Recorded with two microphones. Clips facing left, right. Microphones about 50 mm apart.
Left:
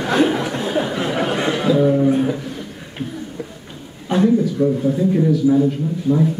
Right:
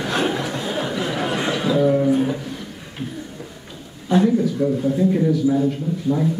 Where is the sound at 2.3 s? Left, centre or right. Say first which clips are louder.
Left 2 dB; centre.